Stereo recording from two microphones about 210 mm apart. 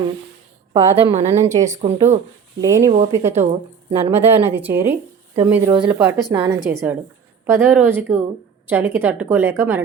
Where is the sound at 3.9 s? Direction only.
30° right (ahead or behind).